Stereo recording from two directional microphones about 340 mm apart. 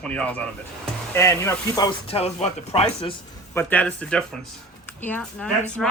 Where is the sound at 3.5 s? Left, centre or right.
Centre.